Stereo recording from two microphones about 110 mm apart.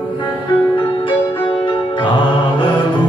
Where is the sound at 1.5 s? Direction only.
50° left (ahead or behind).